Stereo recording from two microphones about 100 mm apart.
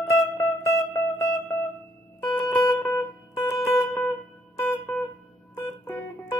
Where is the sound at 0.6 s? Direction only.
30° left (ahead or behind).